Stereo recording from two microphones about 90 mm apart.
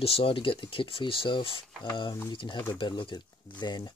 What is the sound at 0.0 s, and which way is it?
Speech, 85° left.